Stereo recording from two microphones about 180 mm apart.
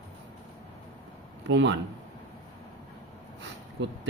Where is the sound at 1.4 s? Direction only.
85° right.